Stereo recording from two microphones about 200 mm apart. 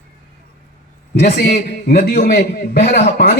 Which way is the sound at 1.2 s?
55° left (ahead or behind).